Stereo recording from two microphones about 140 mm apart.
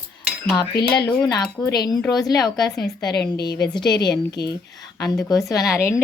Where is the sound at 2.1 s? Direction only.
30° left (ahead or behind).